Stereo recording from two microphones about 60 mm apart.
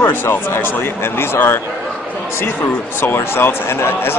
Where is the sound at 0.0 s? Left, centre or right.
Left.